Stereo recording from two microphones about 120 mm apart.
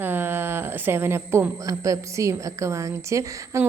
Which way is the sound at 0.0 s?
15° right (ahead or behind).